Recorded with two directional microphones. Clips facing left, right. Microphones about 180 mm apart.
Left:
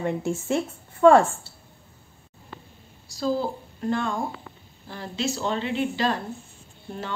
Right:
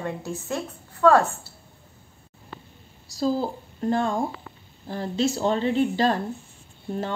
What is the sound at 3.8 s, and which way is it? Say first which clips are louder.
A woman's voice: right 3 dB; 40° right (ahead or behind).